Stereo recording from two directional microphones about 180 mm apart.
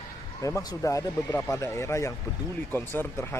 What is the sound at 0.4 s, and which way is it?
Speech, 20° left (ahead or behind).